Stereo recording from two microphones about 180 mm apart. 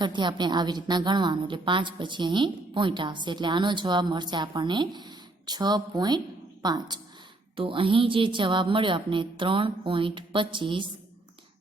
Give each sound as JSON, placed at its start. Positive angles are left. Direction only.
{"t": 0.0, "sound": "a woman's voice", "side_deg": -25}